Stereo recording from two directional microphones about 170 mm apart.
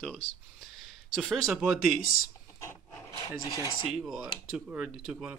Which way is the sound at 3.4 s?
20° left (ahead or behind).